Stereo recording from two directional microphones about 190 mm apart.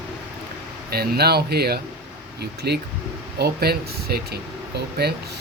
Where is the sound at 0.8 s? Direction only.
55° right (ahead or behind).